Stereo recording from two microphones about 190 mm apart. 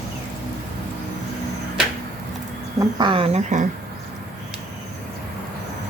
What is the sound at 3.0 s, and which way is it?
Speech, 25° right (ahead or behind).